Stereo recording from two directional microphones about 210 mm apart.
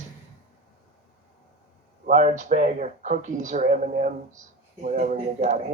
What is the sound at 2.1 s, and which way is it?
Speech, 35° right (ahead or behind).